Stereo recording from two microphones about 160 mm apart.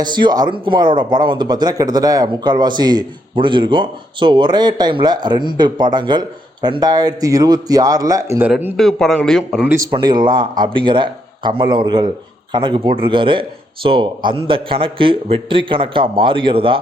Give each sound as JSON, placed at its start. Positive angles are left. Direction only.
{"t": 0.0, "sound": "speech", "side_deg": -30}
{"t": 8.7, "sound": "a man's voice", "side_deg": 0}
{"t": 9.9, "sound": "a man's voice", "side_deg": -30}